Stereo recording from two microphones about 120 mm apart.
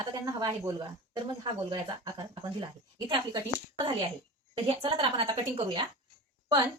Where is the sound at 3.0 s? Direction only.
45° right (ahead or behind).